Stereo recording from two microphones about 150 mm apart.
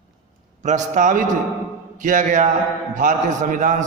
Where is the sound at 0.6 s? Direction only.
55° right (ahead or behind).